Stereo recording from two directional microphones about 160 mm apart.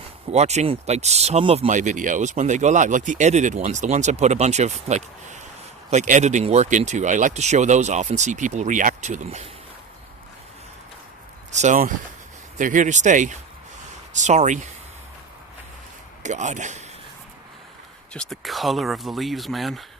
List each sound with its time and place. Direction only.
0.3 s speech: 45° right (ahead or behind)
1.6 s speech: 50° right (ahead or behind)
11.5 s speech: 50° right (ahead or behind)
16.2 s speech: 50° right (ahead or behind)
18.1 s speech: 5° left (ahead or behind)